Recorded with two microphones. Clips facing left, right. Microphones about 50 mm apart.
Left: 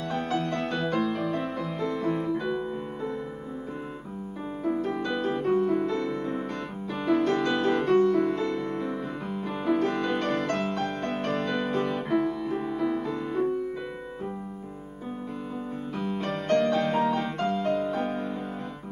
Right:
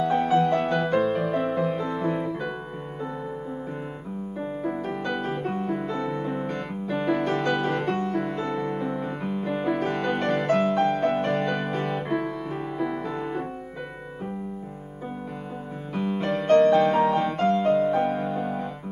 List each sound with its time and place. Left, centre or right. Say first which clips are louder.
0.0 s music: right 8 dB; centre
4.6 s music: left 3 dB; centre
8.5 s music: right 2 dB; right
13.1 s music: left 2 dB; right
15.9 s music: right 5 dB; centre
16.3 s music: right 6 dB; centre
16.5 s music: right 7 dB; centre
16.9 s music: right 4 dB; centre